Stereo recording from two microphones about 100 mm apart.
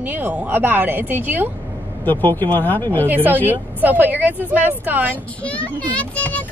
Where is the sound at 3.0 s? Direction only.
20° right (ahead or behind).